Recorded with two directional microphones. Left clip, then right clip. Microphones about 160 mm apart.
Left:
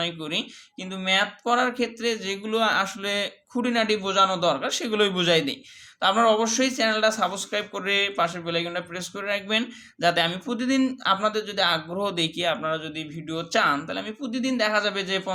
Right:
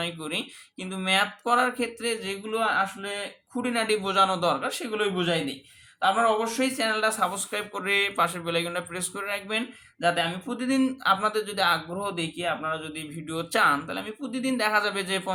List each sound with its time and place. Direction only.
0.0 s speech: 10° left (ahead or behind); by 3.6 s 35° left (ahead or behind)
3.6 s speech: 20° left (ahead or behind)
4.7 s speech: 25° left (ahead or behind); by 15.3 s 5° left (ahead or behind)